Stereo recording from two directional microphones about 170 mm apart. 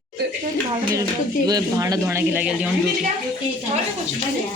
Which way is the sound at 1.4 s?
20° right (ahead or behind).